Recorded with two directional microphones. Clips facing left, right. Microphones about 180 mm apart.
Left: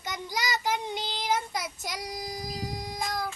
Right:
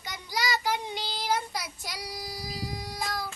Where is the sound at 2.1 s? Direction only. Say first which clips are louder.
Left 3 dB; 50° left (ahead or behind).